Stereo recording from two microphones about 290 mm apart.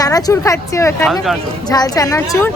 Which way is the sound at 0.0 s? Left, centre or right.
Centre.